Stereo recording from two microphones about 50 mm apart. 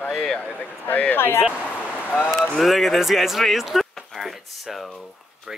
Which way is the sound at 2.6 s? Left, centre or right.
Centre.